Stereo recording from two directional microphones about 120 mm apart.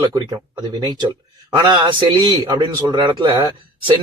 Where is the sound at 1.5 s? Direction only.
40° right (ahead or behind).